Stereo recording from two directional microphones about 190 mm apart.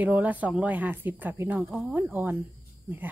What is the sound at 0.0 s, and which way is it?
A woman's voice, 10° right (ahead or behind).